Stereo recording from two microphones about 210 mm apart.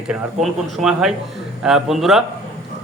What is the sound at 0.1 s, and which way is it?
Speech, centre (ahead or behind).